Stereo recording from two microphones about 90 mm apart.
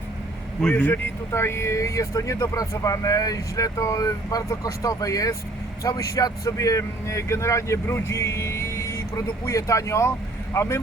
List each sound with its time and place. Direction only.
0.7 s speech: 20° left (ahead or behind)
1.3 s speech: 30° left (ahead or behind)